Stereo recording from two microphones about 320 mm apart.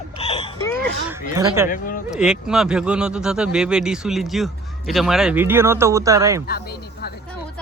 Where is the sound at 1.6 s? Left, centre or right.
Left.